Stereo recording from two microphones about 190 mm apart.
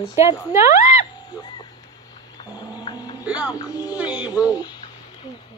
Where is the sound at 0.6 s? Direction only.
40° left (ahead or behind).